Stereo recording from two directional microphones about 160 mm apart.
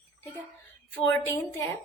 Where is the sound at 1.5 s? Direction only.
20° left (ahead or behind).